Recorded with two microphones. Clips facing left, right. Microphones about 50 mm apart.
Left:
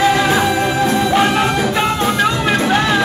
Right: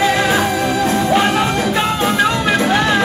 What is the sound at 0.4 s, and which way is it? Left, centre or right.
Music, left.